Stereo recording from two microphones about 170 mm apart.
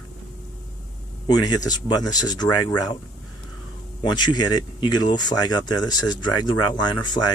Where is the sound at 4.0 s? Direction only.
25° left (ahead or behind).